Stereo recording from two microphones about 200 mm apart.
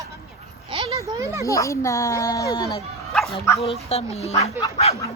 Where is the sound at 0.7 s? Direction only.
20° right (ahead or behind).